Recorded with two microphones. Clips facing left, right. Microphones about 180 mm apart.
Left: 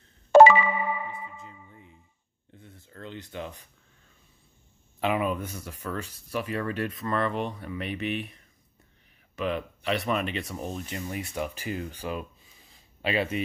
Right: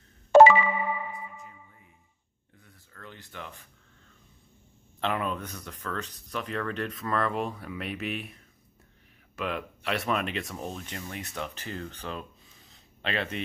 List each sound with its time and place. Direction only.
0.3 s ding: 70° left (ahead or behind)
2.6 s speech: 25° left (ahead or behind)
5.0 s speech: 10° left (ahead or behind)